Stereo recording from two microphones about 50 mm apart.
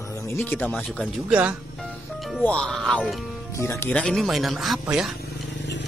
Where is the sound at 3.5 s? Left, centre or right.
Left.